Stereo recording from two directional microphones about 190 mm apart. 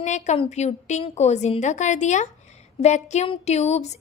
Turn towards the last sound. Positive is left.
turn(degrees=35)  # may be behind; listen again after turning